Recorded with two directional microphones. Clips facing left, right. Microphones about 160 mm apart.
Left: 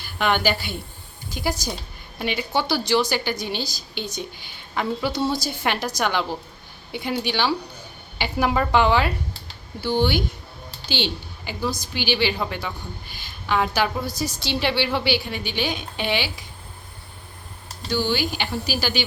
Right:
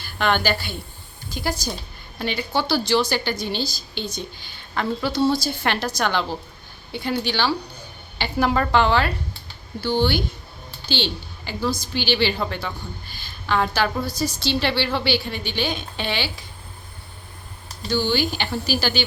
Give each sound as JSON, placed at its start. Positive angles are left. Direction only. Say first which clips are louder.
{"t": 0.0, "sound": "a woman's voice", "louder": "even", "side_deg": 15}
{"t": 17.9, "sound": "a woman's voice", "louder": "right 1 dB", "side_deg": 10}